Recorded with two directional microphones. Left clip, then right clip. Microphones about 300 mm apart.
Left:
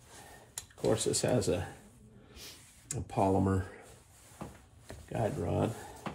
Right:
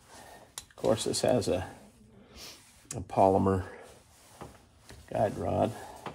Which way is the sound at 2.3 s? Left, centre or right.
Right.